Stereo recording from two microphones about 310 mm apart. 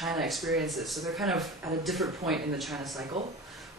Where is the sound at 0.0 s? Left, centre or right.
Centre.